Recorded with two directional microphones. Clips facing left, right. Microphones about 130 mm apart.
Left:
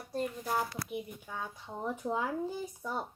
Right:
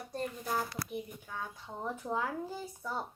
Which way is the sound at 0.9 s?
10° left (ahead or behind).